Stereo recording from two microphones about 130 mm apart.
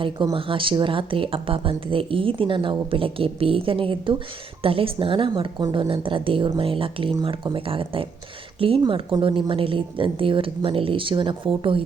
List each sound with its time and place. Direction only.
0.3 s a woman's voice: 40° right (ahead or behind)